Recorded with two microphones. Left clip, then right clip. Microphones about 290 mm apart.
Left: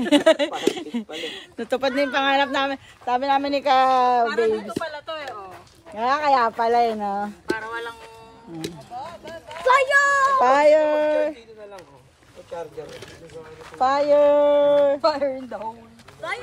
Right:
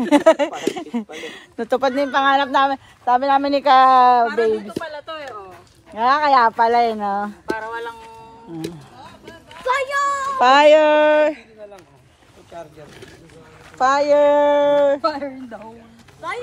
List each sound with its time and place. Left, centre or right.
0.0 s speech: centre
4.6 s speech: centre
5.9 s speech: right
7.4 s speech: centre
9.3 s speech: left
10.4 s speech: right
12.5 s speech: centre
13.7 s speech: right
15.0 s speech: centre